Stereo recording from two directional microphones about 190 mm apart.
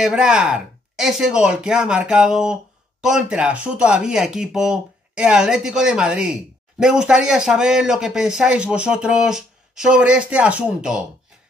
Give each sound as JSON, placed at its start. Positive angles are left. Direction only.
{"t": 0.0, "sound": "speech", "side_deg": -5}